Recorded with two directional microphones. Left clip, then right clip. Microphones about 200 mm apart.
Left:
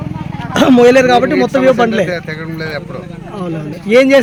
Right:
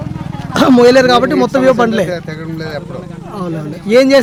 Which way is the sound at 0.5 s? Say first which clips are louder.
Even; centre (ahead or behind).